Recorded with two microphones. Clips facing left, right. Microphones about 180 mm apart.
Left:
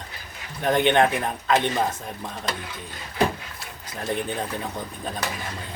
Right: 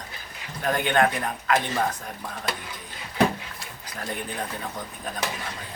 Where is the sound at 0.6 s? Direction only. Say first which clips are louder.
Left 3 dB; 25° left (ahead or behind).